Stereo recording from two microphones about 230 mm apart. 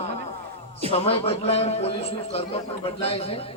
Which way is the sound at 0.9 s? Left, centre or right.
Left.